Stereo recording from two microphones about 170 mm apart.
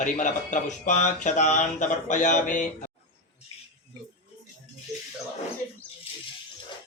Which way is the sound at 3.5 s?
35° left (ahead or behind).